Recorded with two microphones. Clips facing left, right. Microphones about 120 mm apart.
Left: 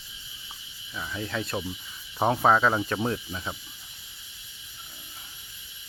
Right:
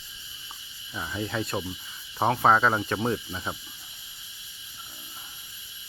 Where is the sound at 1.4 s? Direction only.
5° right (ahead or behind).